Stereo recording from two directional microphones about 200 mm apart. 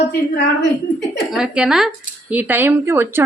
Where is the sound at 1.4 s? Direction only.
5° right (ahead or behind).